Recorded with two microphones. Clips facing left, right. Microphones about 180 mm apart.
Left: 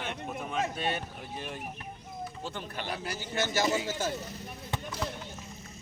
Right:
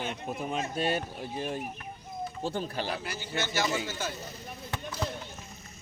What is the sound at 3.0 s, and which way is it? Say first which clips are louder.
Speech: left 1 dB; 40° left (ahead or behind).